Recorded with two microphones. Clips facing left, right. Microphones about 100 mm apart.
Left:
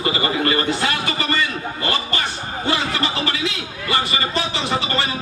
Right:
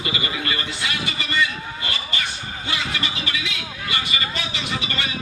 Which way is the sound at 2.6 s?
40° left (ahead or behind).